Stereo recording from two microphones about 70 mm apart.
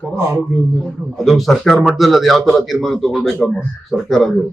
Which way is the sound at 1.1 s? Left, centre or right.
Centre.